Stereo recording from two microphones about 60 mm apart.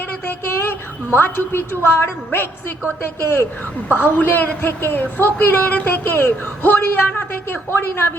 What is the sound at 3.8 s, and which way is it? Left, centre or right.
A man's voice, left.